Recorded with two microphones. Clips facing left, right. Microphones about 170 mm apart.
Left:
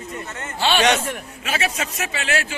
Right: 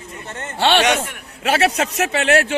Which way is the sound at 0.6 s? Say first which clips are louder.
Right 2 dB; 65° right (ahead or behind).